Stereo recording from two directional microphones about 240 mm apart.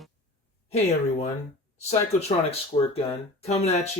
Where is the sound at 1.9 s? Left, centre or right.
Left.